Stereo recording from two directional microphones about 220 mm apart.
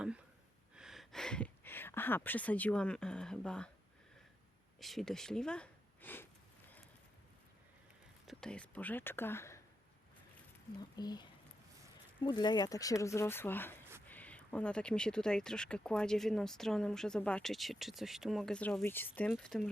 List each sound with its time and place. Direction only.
0.8 s speech: centre (ahead or behind)
4.8 s speech: centre (ahead or behind)
8.3 s speech: 5° left (ahead or behind)
10.9 s speech: 20° left (ahead or behind); by 19.6 s centre (ahead or behind)